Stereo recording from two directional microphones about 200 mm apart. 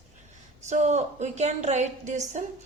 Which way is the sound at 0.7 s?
35° right (ahead or behind).